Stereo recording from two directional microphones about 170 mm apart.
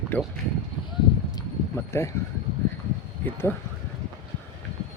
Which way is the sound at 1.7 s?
15° left (ahead or behind).